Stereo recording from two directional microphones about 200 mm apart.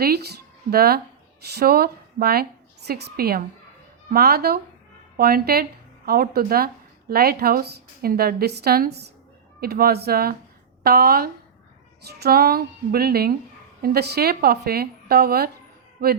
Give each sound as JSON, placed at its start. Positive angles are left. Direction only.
{"t": 0.0, "sound": "a woman's voice", "side_deg": -55}